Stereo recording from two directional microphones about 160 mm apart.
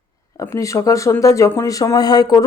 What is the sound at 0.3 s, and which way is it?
Speech, 20° left (ahead or behind).